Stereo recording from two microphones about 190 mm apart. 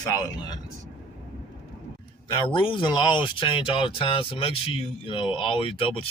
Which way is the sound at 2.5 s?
25° left (ahead or behind).